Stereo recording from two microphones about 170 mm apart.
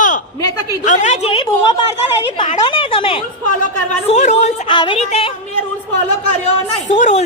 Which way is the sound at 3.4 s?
45° left (ahead or behind).